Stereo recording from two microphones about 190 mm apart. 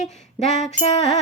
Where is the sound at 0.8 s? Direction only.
35° left (ahead or behind).